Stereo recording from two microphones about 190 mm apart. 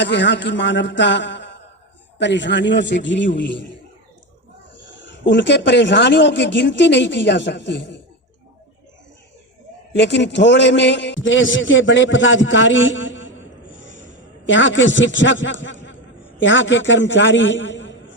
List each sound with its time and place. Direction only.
0.0 s a man's voice: 70° left (ahead or behind)
4.9 s a man's voice: 70° left (ahead or behind)
9.9 s a man's voice: 70° left (ahead or behind)
13.7 s a sound: 75° left (ahead or behind)
16.4 s a man's voice: 75° left (ahead or behind)